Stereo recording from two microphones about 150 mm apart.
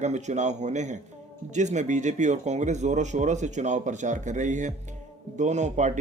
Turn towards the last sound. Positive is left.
turn(degrees=-55)  # may be behind; listen again after turning